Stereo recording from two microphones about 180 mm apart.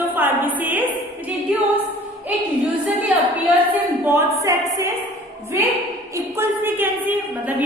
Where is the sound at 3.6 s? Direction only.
15° right (ahead or behind).